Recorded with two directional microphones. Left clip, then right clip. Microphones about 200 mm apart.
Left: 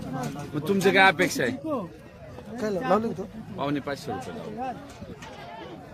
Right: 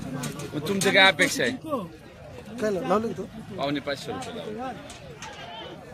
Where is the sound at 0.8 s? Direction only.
55° left (ahead or behind).